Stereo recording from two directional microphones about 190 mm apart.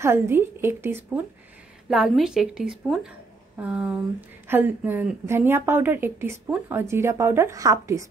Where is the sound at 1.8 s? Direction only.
Centre (ahead or behind).